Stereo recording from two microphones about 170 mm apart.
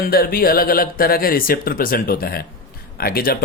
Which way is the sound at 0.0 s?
60° left (ahead or behind).